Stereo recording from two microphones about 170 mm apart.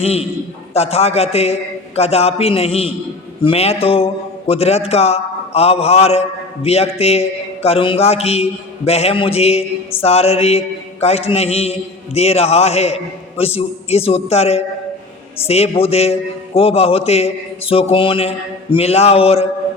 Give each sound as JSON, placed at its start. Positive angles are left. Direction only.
{"t": 0.0, "sound": "a man's voice", "side_deg": 35}